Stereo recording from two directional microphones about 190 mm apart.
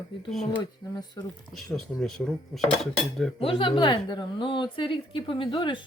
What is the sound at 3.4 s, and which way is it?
Speech, 30° left (ahead or behind).